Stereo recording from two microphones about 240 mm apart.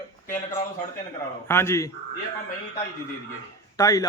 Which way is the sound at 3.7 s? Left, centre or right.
Centre.